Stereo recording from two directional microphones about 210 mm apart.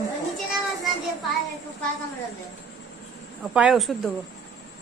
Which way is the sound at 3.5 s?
5° right (ahead or behind).